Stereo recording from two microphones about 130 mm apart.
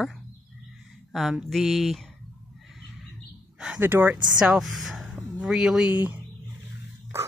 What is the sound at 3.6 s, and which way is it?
Speech, 10° right (ahead or behind).